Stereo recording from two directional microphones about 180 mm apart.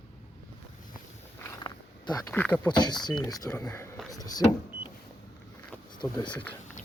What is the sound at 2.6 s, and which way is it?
Speech, 25° left (ahead or behind).